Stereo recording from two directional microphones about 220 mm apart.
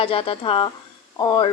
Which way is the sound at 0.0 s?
25° left (ahead or behind).